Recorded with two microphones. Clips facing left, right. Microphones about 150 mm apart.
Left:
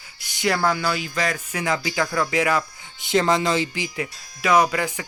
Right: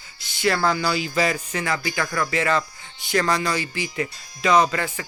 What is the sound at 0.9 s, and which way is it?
Speech, 5° right (ahead or behind).